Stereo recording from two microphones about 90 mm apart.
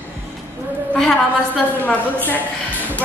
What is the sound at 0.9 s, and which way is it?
A woman's voice, 10° left (ahead or behind).